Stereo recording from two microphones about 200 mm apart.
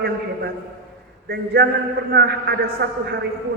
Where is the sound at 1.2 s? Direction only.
50° right (ahead or behind).